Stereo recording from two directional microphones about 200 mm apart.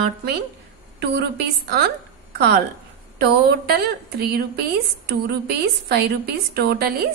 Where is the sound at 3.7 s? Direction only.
50° right (ahead or behind).